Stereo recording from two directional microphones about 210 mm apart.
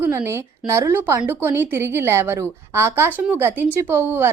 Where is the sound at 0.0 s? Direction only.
10° right (ahead or behind).